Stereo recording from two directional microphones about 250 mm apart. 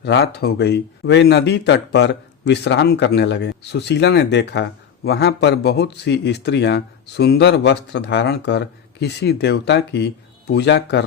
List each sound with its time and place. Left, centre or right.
0.0 s speech: left